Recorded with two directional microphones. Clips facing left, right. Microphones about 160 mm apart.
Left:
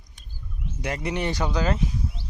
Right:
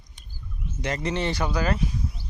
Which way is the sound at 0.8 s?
10° left (ahead or behind).